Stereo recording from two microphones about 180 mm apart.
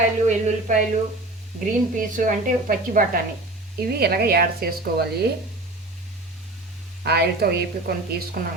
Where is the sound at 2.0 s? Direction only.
50° right (ahead or behind).